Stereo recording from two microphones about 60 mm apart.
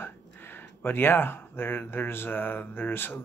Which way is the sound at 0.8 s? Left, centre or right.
Left.